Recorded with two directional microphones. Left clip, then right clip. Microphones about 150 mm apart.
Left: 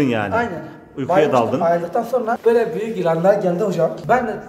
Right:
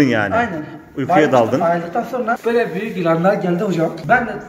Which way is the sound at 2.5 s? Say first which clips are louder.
Left 1 dB; 30° left (ahead or behind).